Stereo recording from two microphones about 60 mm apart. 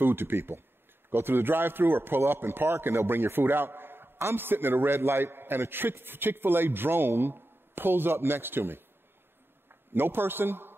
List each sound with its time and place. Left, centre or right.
0.0 s a man's voice: right